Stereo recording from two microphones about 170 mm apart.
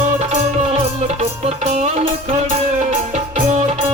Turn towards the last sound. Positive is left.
turn(degrees=-40)  # may be behind; listen again after turning